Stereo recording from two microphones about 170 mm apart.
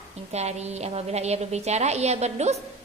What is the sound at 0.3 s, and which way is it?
A woman's voice, 40° right (ahead or behind).